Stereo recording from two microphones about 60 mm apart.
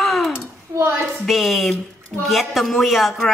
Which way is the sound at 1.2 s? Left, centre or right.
Centre.